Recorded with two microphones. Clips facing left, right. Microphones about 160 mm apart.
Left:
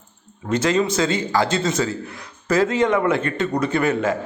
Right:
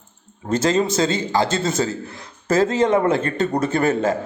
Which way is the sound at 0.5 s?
30° right (ahead or behind).